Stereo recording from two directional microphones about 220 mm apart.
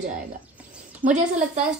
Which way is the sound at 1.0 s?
40° right (ahead or behind).